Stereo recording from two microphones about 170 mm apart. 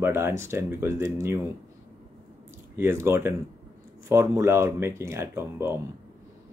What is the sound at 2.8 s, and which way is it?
Speech, 15° right (ahead or behind).